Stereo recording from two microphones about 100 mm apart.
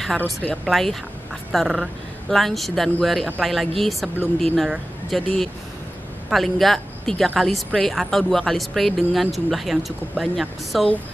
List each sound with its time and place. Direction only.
0.2 s speech: 15° left (ahead or behind)
0.7 s speech: centre (ahead or behind)